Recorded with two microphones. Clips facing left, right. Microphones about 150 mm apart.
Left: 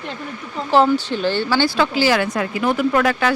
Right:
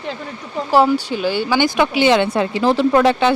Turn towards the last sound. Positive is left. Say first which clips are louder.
# right 4 dB
turn(degrees=-25)  # may be behind; listen again after turning